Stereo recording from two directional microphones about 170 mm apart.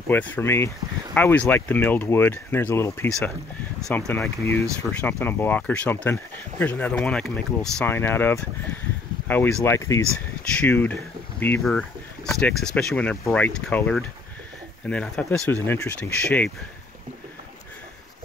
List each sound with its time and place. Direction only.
0.1 s speech: 10° left (ahead or behind)